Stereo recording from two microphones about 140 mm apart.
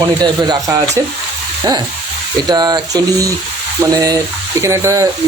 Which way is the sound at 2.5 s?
30° right (ahead or behind).